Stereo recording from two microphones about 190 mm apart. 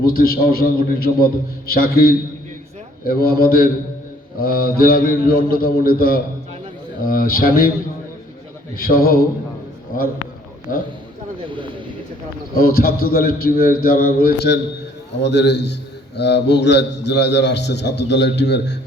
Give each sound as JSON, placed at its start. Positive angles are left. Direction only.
{"t": 0.0, "sound": "a man's voice", "side_deg": 50}
{"t": 8.7, "sound": "a man's voice", "side_deg": 50}
{"t": 10.7, "sound": "a man's voice", "side_deg": 45}
{"t": 12.5, "sound": "a man's voice", "side_deg": 50}